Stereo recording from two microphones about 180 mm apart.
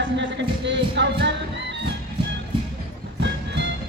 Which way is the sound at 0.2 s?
80° right.